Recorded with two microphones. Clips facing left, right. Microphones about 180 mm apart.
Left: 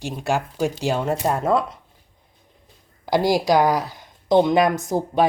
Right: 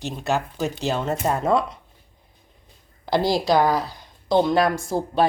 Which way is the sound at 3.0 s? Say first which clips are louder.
Left 2 dB; 10° left (ahead or behind).